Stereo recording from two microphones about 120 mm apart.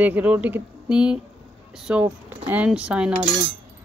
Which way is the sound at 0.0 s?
15° right (ahead or behind).